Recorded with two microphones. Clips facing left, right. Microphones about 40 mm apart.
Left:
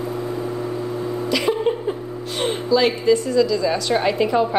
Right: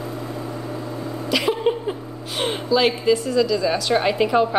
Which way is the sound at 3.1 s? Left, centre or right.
Centre.